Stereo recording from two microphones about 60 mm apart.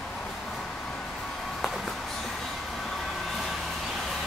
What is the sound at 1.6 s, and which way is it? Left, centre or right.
Music, centre.